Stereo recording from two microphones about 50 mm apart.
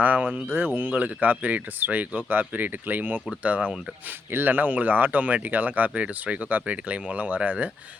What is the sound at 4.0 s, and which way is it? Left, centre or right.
A man's voice, right.